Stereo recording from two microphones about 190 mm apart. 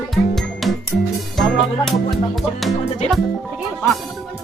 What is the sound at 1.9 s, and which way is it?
Music, centre (ahead or behind).